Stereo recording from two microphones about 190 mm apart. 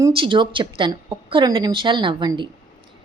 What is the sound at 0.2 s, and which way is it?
A woman's voice, 25° right (ahead or behind).